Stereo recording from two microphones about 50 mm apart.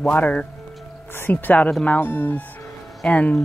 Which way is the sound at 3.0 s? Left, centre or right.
Left.